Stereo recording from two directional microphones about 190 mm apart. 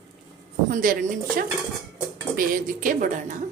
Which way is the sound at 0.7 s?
45° right (ahead or behind).